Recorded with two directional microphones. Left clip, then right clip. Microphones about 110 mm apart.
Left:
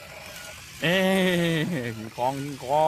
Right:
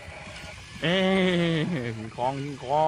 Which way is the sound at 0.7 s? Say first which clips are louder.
Left 1 dB; 40° left (ahead or behind).